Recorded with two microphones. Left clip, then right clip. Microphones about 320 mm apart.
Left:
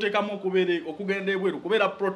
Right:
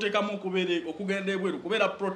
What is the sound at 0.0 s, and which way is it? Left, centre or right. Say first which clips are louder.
A man's voice: left 2 dB; left.